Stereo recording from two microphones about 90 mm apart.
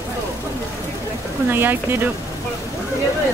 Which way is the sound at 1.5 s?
25° right (ahead or behind).